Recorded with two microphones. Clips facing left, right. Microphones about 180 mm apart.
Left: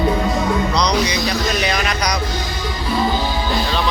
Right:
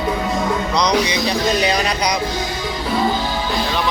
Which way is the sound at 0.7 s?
20° right (ahead or behind).